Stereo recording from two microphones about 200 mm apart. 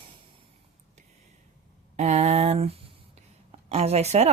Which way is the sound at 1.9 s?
35° right (ahead or behind).